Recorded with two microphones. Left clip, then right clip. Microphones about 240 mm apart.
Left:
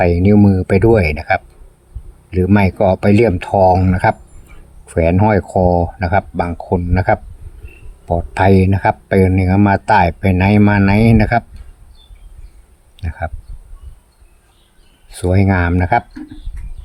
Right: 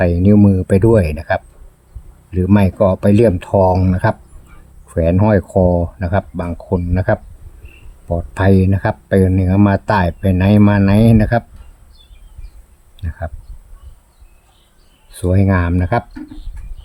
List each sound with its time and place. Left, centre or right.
0.0 s speech: centre
8.3 s speech: centre
13.0 s speech: centre
15.1 s speech: centre